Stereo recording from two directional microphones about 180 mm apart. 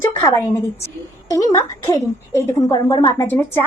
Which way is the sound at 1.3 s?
20° left (ahead or behind).